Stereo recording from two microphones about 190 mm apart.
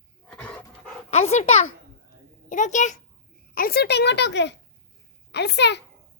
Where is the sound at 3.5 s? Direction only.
55° left (ahead or behind).